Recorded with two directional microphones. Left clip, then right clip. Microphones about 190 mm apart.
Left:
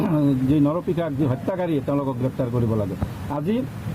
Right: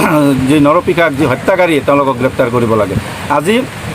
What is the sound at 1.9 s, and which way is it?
Speech, 45° right (ahead or behind).